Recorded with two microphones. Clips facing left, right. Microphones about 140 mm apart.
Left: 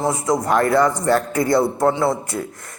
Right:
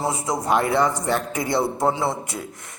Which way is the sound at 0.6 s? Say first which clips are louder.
Left 3 dB; 5° right (ahead or behind).